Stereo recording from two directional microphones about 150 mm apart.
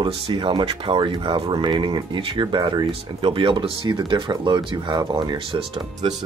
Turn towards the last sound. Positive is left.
turn(degrees=-35)  # may be behind; listen again after turning